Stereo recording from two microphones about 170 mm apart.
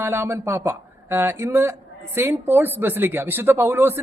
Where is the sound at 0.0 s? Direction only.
15° right (ahead or behind).